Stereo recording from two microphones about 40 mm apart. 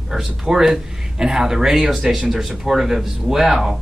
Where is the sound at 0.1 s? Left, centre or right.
Centre.